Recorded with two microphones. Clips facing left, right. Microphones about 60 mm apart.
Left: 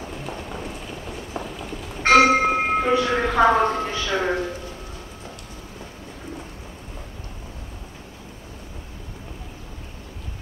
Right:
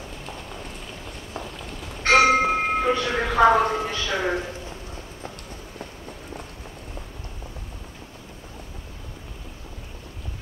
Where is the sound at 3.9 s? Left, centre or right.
Left.